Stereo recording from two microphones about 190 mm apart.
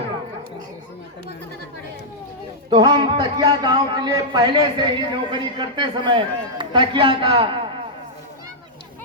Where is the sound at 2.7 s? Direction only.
20° right (ahead or behind).